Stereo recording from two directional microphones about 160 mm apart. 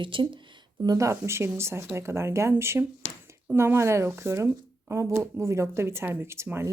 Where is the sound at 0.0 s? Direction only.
30° right (ahead or behind).